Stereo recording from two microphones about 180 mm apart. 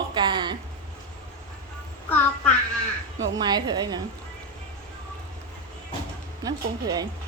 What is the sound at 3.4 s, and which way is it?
Speech, 20° right (ahead or behind).